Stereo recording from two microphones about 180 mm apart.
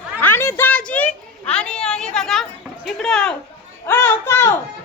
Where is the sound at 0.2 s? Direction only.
15° left (ahead or behind).